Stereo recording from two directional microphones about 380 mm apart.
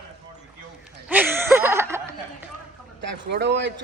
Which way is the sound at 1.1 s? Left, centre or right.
Centre.